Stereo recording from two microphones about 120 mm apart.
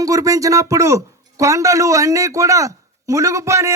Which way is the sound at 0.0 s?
30° right (ahead or behind).